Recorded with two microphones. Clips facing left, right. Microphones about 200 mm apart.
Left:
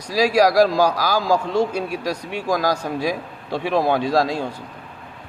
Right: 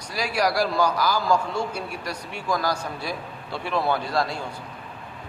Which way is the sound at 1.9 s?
90° left.